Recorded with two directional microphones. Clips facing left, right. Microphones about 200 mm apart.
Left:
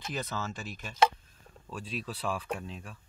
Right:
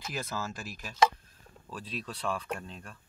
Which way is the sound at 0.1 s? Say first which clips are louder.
Left 1 dB; 5° right (ahead or behind).